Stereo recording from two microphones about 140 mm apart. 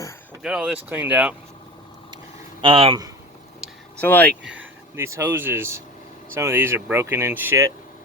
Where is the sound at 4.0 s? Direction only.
15° left (ahead or behind).